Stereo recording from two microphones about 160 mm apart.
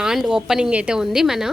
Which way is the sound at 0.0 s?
5° right (ahead or behind).